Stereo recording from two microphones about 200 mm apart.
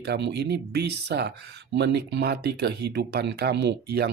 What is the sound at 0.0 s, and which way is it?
Speech, 55° right (ahead or behind).